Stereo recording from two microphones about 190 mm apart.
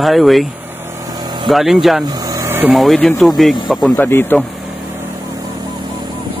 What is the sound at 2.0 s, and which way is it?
Vehicle, 20° right (ahead or behind).